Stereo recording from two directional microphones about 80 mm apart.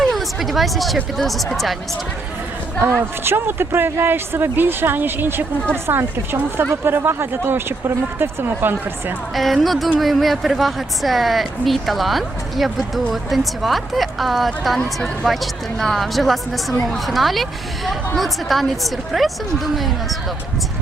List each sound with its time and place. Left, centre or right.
0.0 s a sound: centre
1.1 s a woman's voice: centre
3.2 s speech: right
9.3 s a woman's voice: centre